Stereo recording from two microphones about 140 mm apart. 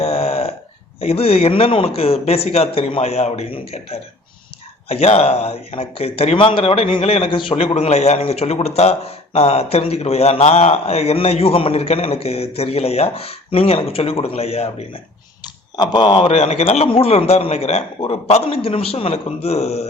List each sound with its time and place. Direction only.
0.0 s burping: 45° left (ahead or behind)
1.0 s speech: 45° left (ahead or behind)
15.7 s speech: 30° left (ahead or behind); by 19.9 s 50° left (ahead or behind)